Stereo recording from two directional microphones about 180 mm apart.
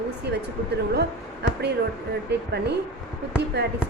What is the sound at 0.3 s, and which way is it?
Speech, 70° right (ahead or behind).